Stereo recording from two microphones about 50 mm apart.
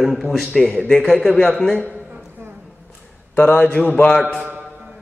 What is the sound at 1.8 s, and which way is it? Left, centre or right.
Speech, left.